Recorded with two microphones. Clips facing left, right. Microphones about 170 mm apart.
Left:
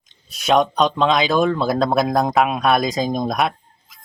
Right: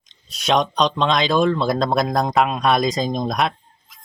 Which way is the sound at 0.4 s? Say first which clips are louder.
Left 2 dB; 5° left (ahead or behind).